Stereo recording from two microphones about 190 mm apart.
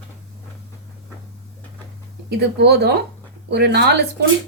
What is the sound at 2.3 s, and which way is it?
A woman's voice, 60° right (ahead or behind).